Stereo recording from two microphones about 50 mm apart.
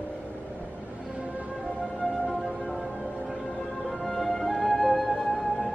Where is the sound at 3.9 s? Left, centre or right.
Centre.